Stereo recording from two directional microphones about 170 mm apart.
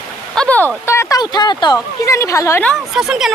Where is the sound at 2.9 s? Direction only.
5° right (ahead or behind).